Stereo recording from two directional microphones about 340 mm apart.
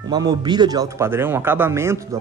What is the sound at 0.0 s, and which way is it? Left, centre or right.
Speech, centre.